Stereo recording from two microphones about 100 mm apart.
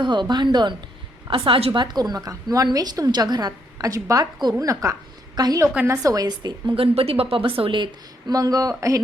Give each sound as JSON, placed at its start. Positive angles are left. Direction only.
{"t": 0.0, "sound": "a woman's voice", "side_deg": -50}
{"t": 1.3, "sound": "a woman's voice", "side_deg": -65}
{"t": 1.8, "sound": "a woman's voice", "side_deg": -45}
{"t": 5.7, "sound": "a woman's voice", "side_deg": -25}
{"t": 6.7, "sound": "a woman's voice", "side_deg": -70}
{"t": 8.3, "sound": "a woman's voice", "side_deg": -40}